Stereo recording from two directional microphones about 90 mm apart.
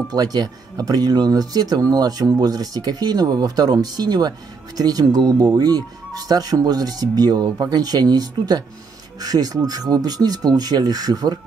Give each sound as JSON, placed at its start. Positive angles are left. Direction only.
{"t": 0.1, "sound": "speech", "side_deg": -45}